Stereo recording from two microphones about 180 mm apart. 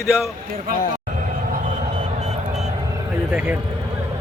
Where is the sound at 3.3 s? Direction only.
10° right (ahead or behind).